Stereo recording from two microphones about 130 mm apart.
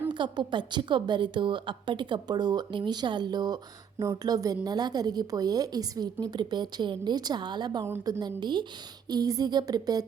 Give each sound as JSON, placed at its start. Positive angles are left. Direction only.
{"t": 0.1, "sound": "a woman's voice", "side_deg": -35}